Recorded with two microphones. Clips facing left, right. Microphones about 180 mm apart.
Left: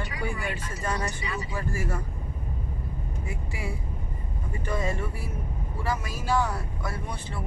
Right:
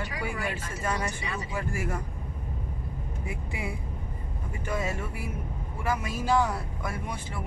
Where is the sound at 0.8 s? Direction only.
5° right (ahead or behind).